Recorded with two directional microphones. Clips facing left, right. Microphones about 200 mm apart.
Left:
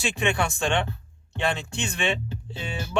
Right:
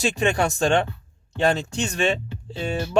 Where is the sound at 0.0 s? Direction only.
40° right (ahead or behind).